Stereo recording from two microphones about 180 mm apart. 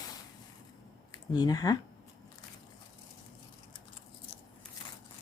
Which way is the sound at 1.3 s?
20° left (ahead or behind).